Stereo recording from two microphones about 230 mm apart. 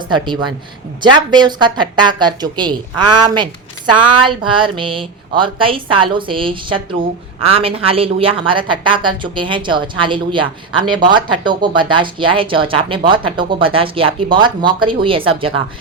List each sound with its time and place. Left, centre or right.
0.1 s speech: centre